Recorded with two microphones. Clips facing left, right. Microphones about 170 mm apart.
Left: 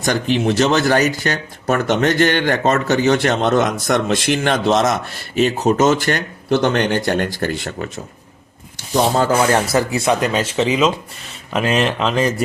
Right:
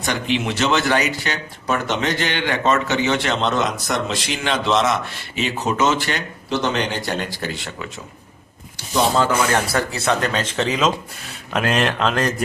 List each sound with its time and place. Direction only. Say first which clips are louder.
0.0 s speech: left 5 dB; 40° left (ahead or behind)
8.9 s speech: left 2 dB; 45° left (ahead or behind)
9.5 s speech: left 4 dB; 25° left (ahead or behind)
10.0 s speech: left 3 dB; 10° left (ahead or behind)